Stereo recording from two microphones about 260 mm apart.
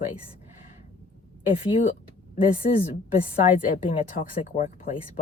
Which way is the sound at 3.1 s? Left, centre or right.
Left.